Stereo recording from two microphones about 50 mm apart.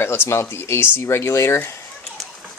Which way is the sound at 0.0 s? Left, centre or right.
Left.